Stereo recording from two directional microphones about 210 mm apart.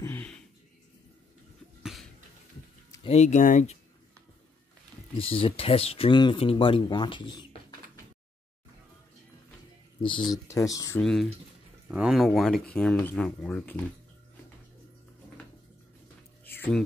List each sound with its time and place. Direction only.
0.0 s a sound: 10° left (ahead or behind)
1.8 s cough: centre (ahead or behind)
2.9 s speech: 25° left (ahead or behind)
5.1 s speech: 25° left (ahead or behind)
10.0 s speech: 20° left (ahead or behind)
11.0 s speech: centre (ahead or behind)
16.4 s a sound: 10° left (ahead or behind)